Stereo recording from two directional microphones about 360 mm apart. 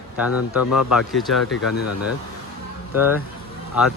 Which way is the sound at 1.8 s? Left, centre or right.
Left.